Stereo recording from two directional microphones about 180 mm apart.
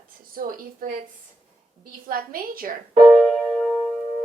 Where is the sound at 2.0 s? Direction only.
55° right (ahead or behind).